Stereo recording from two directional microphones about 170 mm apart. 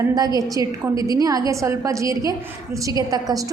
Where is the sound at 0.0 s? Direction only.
20° right (ahead or behind).